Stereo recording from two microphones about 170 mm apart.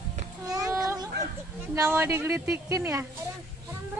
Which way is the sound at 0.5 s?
20° right (ahead or behind).